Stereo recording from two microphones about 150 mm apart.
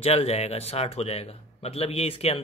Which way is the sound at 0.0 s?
45° left (ahead or behind).